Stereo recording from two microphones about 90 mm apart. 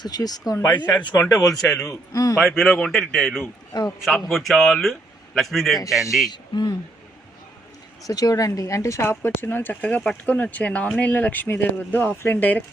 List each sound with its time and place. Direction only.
0.0 s speech: 45° left (ahead or behind)
2.4 s a man's voice: centre (ahead or behind)
6.3 s speech: 55° left (ahead or behind)
8.0 s speech: 40° left (ahead or behind); by 12.6 s 20° left (ahead or behind)